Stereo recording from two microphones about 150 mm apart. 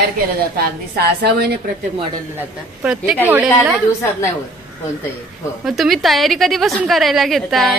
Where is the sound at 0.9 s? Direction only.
90° right.